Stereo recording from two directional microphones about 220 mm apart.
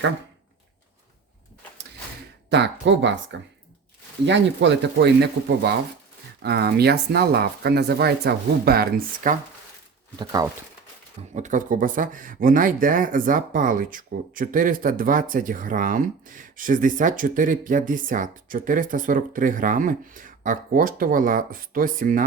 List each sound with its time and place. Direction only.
2.5 s speech: 55° right (ahead or behind)
4.3 s speech: 55° right (ahead or behind)
10.2 s speech: 15° right (ahead or behind)
11.3 s speech: 35° right (ahead or behind)